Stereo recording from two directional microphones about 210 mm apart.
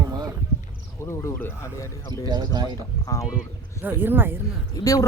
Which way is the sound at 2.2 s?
20° right (ahead or behind).